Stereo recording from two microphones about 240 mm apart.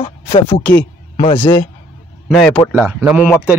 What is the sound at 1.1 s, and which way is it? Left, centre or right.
Speech, left.